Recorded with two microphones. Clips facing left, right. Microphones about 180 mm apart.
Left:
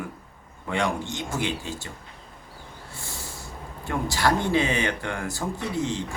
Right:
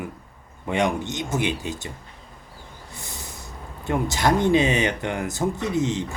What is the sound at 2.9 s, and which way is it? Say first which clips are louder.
Speech: even; 20° right (ahead or behind).